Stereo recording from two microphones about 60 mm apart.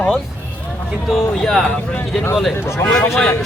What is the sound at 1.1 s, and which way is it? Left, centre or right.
Speech, centre.